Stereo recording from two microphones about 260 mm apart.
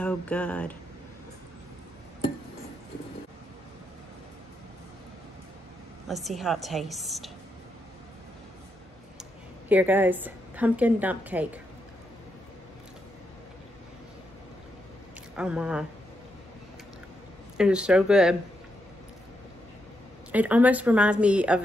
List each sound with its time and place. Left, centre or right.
0.0 s speech: centre
6.0 s speech: centre
9.7 s a woman's voice: centre
15.3 s speech: centre
17.6 s speech: centre
20.2 s speech: centre